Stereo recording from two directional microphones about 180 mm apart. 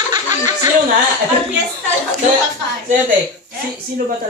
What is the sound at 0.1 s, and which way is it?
Snicker, 20° right (ahead or behind).